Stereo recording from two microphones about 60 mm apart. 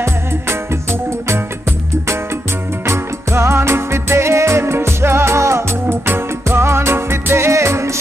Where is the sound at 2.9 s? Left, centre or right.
Right.